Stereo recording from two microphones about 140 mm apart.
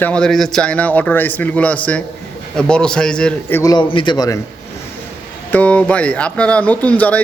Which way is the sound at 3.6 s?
25° left (ahead or behind).